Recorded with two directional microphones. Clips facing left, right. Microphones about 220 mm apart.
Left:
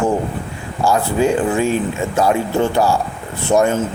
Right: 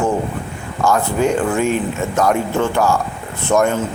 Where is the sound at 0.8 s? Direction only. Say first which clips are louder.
Even; 30° left (ahead or behind).